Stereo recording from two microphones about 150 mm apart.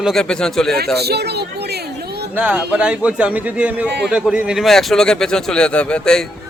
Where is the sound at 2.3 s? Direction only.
10° right (ahead or behind).